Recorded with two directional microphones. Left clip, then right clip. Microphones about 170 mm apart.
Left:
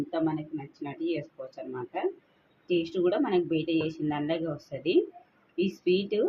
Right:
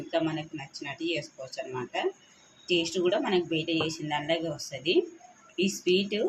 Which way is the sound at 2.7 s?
30° left (ahead or behind).